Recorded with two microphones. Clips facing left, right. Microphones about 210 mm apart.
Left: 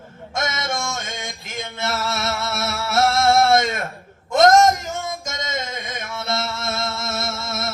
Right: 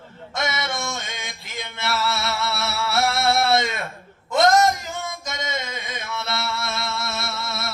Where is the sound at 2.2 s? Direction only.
45° left (ahead or behind).